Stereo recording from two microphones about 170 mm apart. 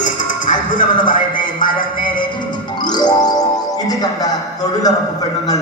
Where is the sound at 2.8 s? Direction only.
25° left (ahead or behind).